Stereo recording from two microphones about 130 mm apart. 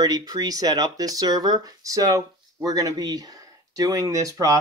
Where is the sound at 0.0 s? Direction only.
30° right (ahead or behind).